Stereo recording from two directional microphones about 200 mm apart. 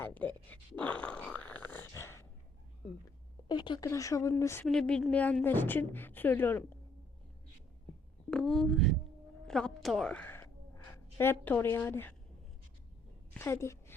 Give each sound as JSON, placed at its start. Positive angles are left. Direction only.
{"t": 0.0, "sound": "a sound", "side_deg": 10}
{"t": 3.5, "sound": "a woman's voice", "side_deg": 20}
{"t": 4.6, "sound": "a woman's voice", "side_deg": 0}
{"t": 8.3, "sound": "a woman's voice", "side_deg": 0}
{"t": 13.3, "sound": "a woman's voice", "side_deg": 15}